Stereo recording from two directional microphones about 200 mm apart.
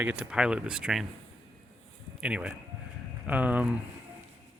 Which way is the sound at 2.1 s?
5° right (ahead or behind).